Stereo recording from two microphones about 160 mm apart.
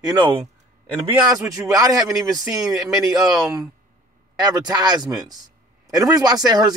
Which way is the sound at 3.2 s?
25° right (ahead or behind).